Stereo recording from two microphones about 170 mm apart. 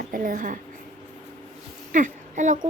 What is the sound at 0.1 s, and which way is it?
Speech, 55° right (ahead or behind).